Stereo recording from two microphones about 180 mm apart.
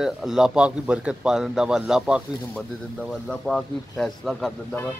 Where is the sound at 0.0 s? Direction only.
5° right (ahead or behind).